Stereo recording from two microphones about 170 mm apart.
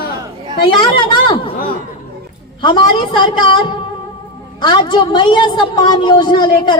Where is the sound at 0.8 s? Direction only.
30° left (ahead or behind).